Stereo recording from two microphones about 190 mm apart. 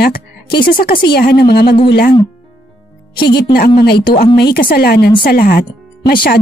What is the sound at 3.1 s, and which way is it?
Speech, 55° left (ahead or behind).